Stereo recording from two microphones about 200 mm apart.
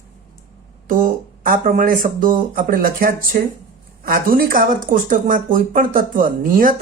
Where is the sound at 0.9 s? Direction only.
45° right (ahead or behind).